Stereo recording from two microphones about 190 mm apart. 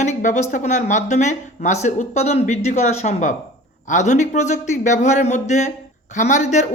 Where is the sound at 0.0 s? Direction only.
40° left (ahead or behind).